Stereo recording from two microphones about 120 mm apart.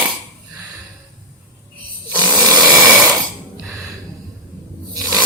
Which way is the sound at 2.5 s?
5° right (ahead or behind).